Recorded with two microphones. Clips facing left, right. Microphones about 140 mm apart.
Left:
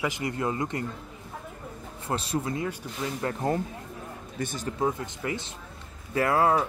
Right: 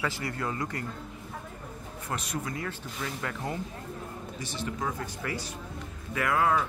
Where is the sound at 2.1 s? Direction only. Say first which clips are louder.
Left 5 dB; 30° left (ahead or behind).